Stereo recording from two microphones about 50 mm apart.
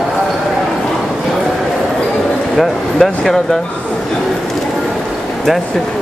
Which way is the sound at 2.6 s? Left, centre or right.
Centre.